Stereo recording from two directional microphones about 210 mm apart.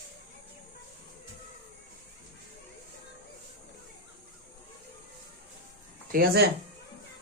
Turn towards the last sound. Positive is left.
turn(degrees=-50)  # may be behind; listen again after turning